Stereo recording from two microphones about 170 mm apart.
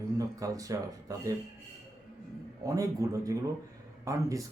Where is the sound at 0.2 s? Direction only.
20° right (ahead or behind).